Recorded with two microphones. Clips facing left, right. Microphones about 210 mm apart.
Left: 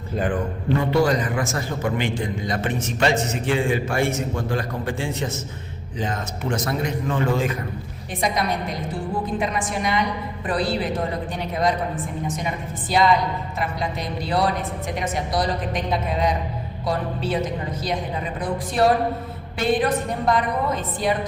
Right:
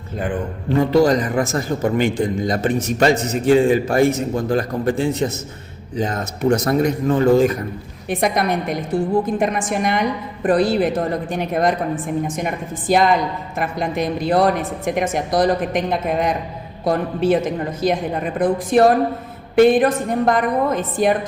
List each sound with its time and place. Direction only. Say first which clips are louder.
0.8 s a man's voice: right 6 dB; 40° right (ahead or behind)
8.1 s a woman's voice: right 5 dB; 60° right (ahead or behind)
9.4 s a woman's voice: right 5 dB; 50° right (ahead or behind)